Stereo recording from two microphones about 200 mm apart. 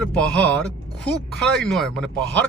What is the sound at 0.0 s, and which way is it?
A man's voice, 5° left (ahead or behind).